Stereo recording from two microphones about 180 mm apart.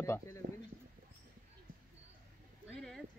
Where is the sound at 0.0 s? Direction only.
15° left (ahead or behind).